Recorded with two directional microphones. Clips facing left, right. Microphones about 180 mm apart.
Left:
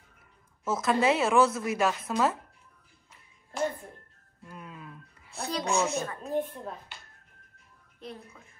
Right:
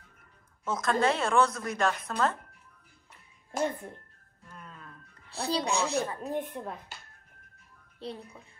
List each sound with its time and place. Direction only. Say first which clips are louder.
0.7 s a woman's voice: left 2 dB; 5° left (ahead or behind)
3.5 s a child's voice: even; 45° right (ahead or behind)
4.5 s music: left 4 dB; 10° left (ahead or behind)
5.3 s a child's voice: even; 35° right (ahead or behind)
6.9 s finger snapping: right 1 dB; 40° right (ahead or behind)
8.0 s a child's voice: right 3 dB; 30° right (ahead or behind)